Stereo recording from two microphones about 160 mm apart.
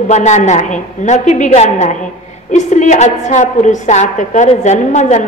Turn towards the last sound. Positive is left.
turn(degrees=45)  # may be behind; listen again after turning